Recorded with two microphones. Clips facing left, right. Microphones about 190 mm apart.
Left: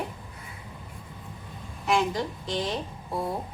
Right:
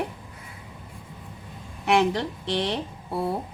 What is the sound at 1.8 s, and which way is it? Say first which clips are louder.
A woman's voice: right 4 dB; 70° right (ahead or behind).